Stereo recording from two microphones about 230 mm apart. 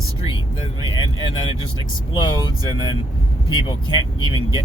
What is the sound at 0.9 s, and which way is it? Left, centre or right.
Speech, centre.